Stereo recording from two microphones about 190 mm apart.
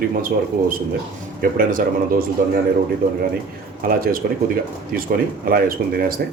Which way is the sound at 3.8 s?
50° right (ahead or behind).